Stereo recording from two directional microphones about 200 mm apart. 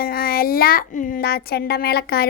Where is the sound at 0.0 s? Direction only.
45° left (ahead or behind).